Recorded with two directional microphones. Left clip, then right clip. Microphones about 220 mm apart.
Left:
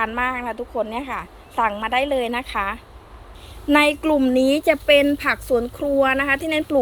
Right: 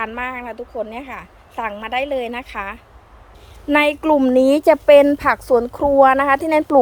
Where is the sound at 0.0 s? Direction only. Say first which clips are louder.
Left 2 dB; 5° right (ahead or behind).